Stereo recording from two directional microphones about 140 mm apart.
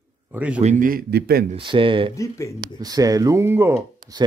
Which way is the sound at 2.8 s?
25° right (ahead or behind).